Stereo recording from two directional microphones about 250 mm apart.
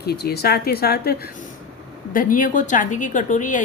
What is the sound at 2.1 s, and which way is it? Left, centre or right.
Speech, left.